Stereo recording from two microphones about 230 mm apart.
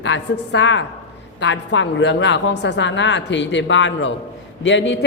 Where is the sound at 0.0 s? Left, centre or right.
Left.